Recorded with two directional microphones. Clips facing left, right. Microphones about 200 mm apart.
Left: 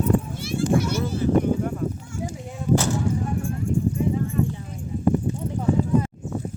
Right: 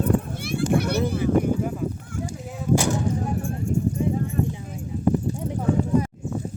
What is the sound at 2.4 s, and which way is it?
Artillery fire, centre (ahead or behind).